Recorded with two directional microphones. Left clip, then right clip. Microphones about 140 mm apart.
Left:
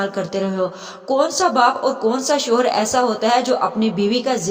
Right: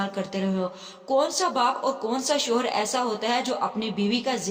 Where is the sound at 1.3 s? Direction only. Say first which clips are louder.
Left 8 dB; 40° left (ahead or behind).